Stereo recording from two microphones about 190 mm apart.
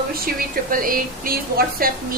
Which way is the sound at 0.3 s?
45° right (ahead or behind).